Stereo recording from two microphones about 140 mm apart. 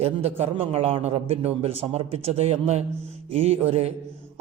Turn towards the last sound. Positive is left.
turn(degrees=-50)  # may be behind; listen again after turning